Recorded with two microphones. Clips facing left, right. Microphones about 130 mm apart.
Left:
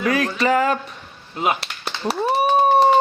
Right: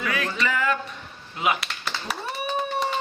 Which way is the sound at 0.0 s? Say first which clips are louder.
Left 7 dB; 40° left (ahead or behind).